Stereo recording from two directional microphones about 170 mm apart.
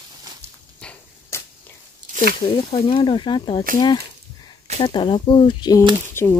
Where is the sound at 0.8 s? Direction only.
5° left (ahead or behind).